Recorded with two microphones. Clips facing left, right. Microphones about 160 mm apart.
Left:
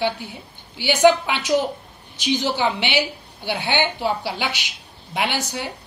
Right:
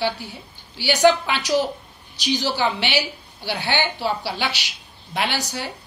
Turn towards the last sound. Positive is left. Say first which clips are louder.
# left 1 dB
turn(degrees=15)  # may be behind; listen again after turning